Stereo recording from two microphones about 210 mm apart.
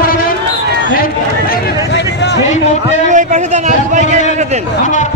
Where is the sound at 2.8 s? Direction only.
35° right (ahead or behind).